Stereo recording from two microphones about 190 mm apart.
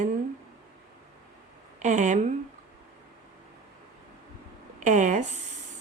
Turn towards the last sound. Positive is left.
turn(degrees=-40)  # may be behind; listen again after turning